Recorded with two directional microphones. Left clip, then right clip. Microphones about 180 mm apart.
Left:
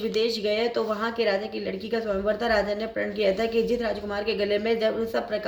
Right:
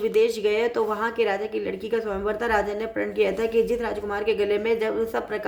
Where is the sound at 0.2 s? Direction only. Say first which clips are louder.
Right 3 dB; 50° right (ahead or behind).